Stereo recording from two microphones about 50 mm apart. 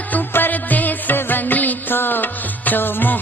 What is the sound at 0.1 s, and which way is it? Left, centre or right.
Music, left.